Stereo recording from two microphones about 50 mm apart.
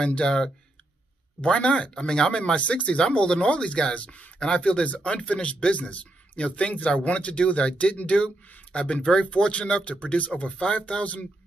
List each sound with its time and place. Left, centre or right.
0.0 s speech: centre